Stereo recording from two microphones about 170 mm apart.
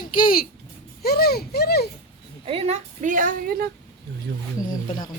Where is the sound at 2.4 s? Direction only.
35° right (ahead or behind); by 3.7 s 60° right (ahead or behind).